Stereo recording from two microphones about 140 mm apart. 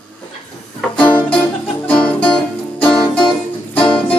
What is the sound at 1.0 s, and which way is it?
Music, 10° left (ahead or behind).